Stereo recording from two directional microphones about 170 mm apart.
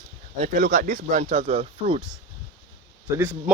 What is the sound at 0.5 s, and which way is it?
Speech, 55° right (ahead or behind).